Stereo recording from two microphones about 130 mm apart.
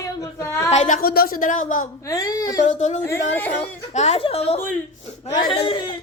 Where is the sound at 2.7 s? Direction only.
65° left (ahead or behind).